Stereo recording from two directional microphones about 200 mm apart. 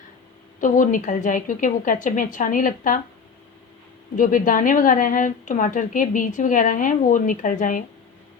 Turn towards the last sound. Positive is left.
turn(degrees=40)  # may be behind; listen again after turning